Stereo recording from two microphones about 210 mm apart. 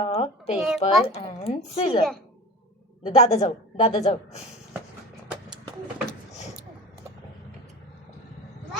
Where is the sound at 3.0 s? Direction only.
30° left (ahead or behind).